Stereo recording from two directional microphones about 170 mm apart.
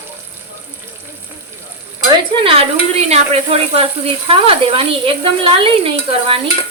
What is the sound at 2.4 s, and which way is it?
Speech, 35° right (ahead or behind).